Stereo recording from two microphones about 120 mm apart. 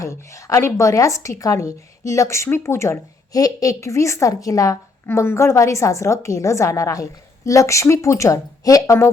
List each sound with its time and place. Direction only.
0.0 s a woman's voice: 25° left (ahead or behind)